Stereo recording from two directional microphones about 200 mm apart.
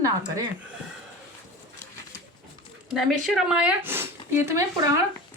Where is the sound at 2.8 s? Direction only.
Centre (ahead or behind).